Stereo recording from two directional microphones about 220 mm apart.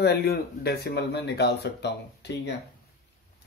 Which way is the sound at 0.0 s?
45° left (ahead or behind).